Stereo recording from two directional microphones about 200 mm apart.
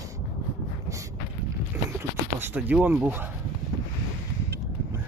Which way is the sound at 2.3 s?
10° right (ahead or behind).